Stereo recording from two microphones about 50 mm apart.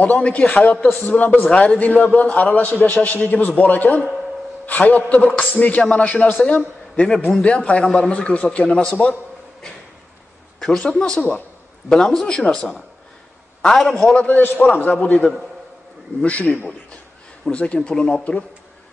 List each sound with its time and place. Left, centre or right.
0.0 s a man's voice: left
7.2 s a man's voice: centre
10.6 s speech: centre
14.1 s a man's voice: left